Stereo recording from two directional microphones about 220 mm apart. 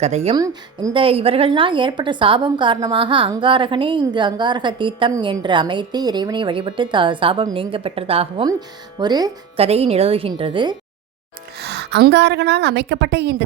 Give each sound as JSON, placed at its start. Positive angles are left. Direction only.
{"t": 0.0, "sound": "a woman's voice", "side_deg": -30}
{"t": 0.3, "sound": "a woman's voice", "side_deg": -15}
{"t": 11.6, "sound": "a woman's voice", "side_deg": -50}